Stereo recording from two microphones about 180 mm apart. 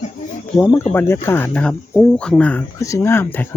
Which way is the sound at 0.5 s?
10° left (ahead or behind).